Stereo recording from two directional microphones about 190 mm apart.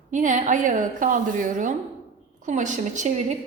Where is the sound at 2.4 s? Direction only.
40° right (ahead or behind).